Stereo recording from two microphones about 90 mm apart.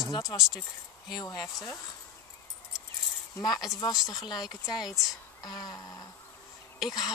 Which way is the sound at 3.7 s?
40° left (ahead or behind).